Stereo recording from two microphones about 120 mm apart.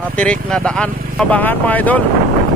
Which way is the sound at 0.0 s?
10° left (ahead or behind).